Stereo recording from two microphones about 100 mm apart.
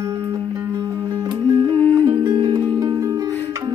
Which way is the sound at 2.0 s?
50° right (ahead or behind).